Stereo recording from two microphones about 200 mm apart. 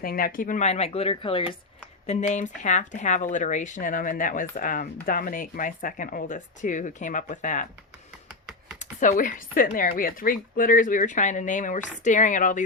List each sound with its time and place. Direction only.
0.0 s a woman's voice: 45° left (ahead or behind); by 1.5 s 25° left (ahead or behind)
2.0 s a woman's voice: 35° left (ahead or behind)
8.8 s a woman's voice: 40° left (ahead or behind)